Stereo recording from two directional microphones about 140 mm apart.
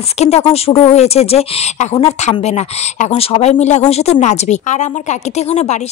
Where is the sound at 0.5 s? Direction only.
45° left (ahead or behind).